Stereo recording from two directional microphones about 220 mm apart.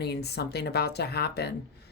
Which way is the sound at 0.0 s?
50° left (ahead or behind).